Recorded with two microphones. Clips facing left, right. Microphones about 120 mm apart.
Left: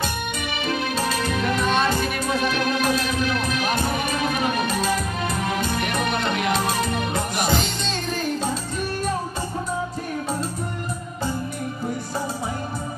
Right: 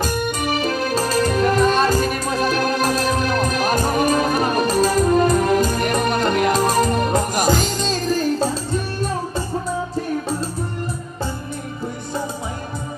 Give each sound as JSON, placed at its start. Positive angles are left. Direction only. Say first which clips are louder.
{"t": 0.0, "sound": "music", "louder": "right 6 dB", "side_deg": -40}